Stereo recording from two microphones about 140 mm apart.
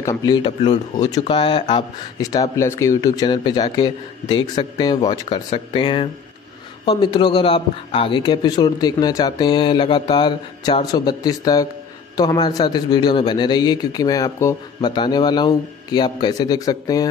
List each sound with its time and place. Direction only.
0.0 s speech: 25° left (ahead or behind)
1.2 s a man's voice: 35° left (ahead or behind)